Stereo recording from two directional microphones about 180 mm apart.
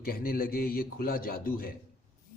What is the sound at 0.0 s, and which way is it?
A man's voice, 55° left (ahead or behind).